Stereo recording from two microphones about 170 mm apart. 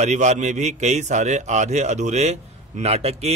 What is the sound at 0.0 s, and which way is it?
Speech, 45° right (ahead or behind).